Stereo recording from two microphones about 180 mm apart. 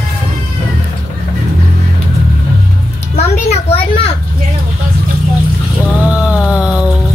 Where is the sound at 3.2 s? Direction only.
35° left (ahead or behind).